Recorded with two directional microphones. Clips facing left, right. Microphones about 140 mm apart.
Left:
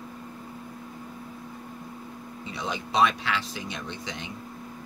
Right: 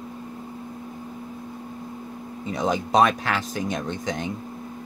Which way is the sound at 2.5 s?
45° right (ahead or behind).